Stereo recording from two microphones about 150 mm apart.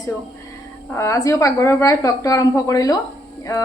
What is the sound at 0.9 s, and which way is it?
Speech, 20° left (ahead or behind).